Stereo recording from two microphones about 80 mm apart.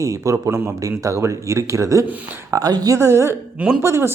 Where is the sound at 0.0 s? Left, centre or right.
Right.